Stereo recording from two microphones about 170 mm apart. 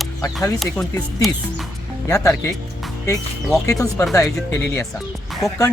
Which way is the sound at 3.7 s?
20° left (ahead or behind).